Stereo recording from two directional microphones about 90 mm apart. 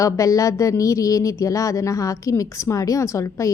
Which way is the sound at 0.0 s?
35° left (ahead or behind).